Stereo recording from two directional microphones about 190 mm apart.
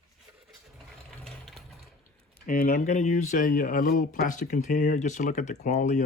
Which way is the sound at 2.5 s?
50° left (ahead or behind).